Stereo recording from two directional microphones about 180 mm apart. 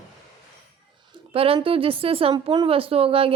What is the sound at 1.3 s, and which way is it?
A woman's voice, 30° right (ahead or behind).